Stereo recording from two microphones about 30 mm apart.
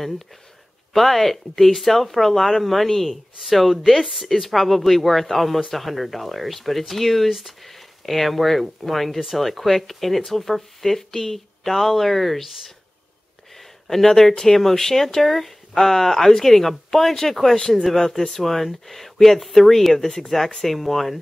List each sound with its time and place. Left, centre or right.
0.9 s speech: centre
7.2 s speech: centre
13.8 s speech: centre
17.6 s speech: left; by 21.2 s centre